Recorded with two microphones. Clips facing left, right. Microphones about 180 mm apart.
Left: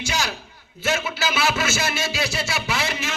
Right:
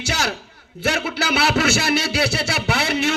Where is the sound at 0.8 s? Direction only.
65° right (ahead or behind).